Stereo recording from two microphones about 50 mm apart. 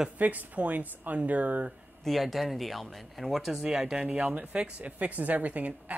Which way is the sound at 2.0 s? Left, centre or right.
Centre.